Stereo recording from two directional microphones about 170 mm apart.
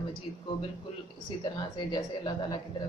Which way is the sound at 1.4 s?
25° left (ahead or behind).